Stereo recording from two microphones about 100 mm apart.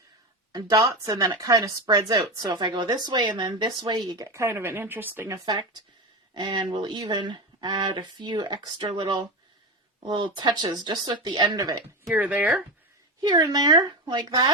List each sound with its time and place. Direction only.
1.0 s speech: 40° right (ahead or behind)
4.3 s speech: 25° right (ahead or behind)
5.3 s speech: 45° right (ahead or behind)
12.1 s speech: 15° right (ahead or behind)
13.2 s speech: 45° right (ahead or behind)